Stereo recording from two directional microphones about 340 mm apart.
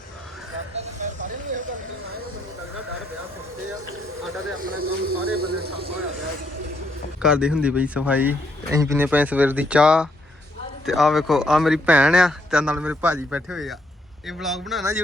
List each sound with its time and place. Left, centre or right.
0.8 s vehicle: right
4.7 s speech: right
7.2 s speech: centre